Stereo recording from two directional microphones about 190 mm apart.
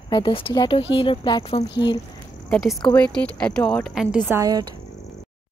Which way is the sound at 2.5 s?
Centre (ahead or behind).